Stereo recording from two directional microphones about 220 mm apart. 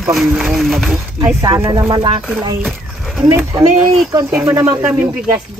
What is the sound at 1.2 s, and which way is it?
Speech, 15° right (ahead or behind).